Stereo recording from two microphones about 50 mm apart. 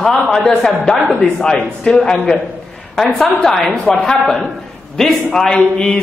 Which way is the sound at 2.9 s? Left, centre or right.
Centre.